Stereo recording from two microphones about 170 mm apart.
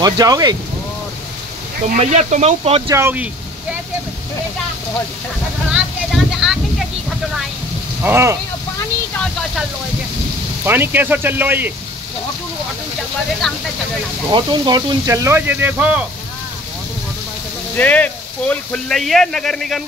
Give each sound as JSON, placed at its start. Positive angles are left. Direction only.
{"t": 0.0, "sound": "speech", "side_deg": -20}
{"t": 2.0, "sound": "speech", "side_deg": -45}
{"t": 2.9, "sound": "speech", "side_deg": -15}
{"t": 5.7, "sound": "a sound", "side_deg": 0}
{"t": 8.0, "sound": "speech", "side_deg": -15}
{"t": 10.6, "sound": "speech", "side_deg": -10}
{"t": 13.4, "sound": "speech", "side_deg": 5}
{"t": 14.3, "sound": "speech", "side_deg": -25}
{"t": 17.7, "sound": "speech", "side_deg": 10}